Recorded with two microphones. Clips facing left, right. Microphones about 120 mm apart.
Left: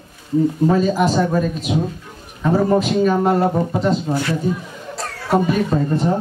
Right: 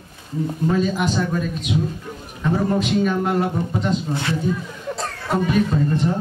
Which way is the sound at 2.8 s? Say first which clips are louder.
Left 4 dB; 40° left (ahead or behind).